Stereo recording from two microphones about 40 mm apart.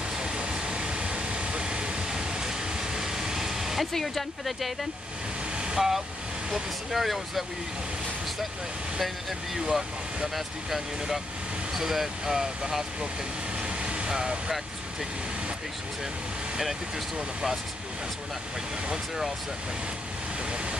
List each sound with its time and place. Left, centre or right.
0.2 s vehicle: right
3.9 s speech: centre
5.8 s speech: centre
9.0 s speech: centre
13.6 s vehicle: right